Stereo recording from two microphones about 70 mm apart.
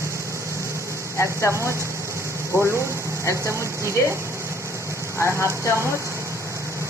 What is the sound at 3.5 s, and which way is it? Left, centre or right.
Speech, right.